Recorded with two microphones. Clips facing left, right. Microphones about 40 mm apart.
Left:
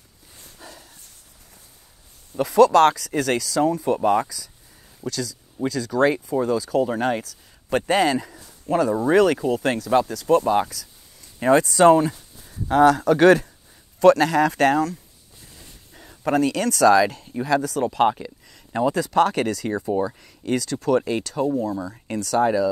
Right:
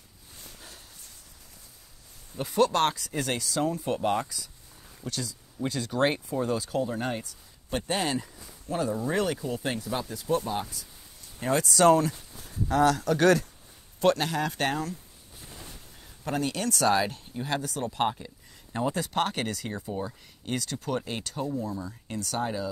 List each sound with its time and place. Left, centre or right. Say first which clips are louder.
0.6 s dog: left 10 dB; left
2.3 s speech: left 10 dB; left
5.9 s speech: left 6 dB; left
6.4 s speech: left 7 dB; left
7.7 s speech: left 9 dB; left
8.6 s speech: left 9 dB; left
11.3 s speech: left 8 dB; left
14.0 s speech: left 10 dB; left
16.3 s speech: left 9 dB; left
21.6 s speech: left 8 dB; left